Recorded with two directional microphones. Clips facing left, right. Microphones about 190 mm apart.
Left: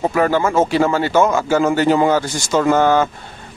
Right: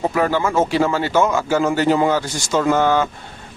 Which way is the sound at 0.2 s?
50° left (ahead or behind).